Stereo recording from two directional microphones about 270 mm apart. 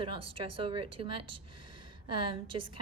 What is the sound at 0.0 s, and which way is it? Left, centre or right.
A woman's voice, centre.